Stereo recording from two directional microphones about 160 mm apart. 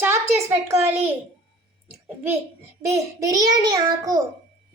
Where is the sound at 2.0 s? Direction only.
15° right (ahead or behind).